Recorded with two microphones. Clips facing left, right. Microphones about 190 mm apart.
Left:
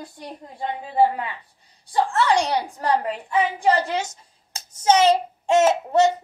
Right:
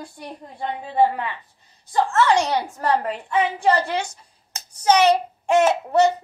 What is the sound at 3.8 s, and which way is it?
Child singing, 20° left (ahead or behind).